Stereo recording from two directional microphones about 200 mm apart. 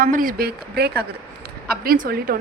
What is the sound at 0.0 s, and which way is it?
A woman's voice, 45° right (ahead or behind).